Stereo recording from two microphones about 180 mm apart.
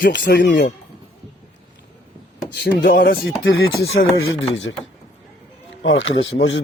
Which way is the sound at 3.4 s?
90° left.